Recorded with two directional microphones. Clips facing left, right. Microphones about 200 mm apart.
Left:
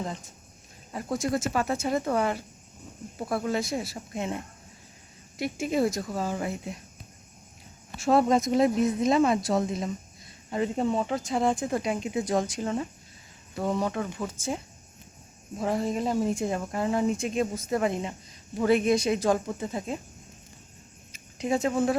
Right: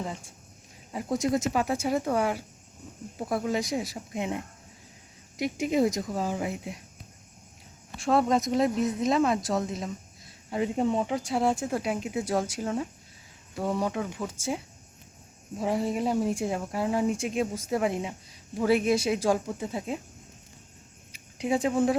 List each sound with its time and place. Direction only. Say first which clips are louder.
0.0 s speech: left 1 dB; 10° right (ahead or behind)
7.9 s speech: left 2 dB; 5° left (ahead or behind)
21.1 s speech: even; 10° right (ahead or behind)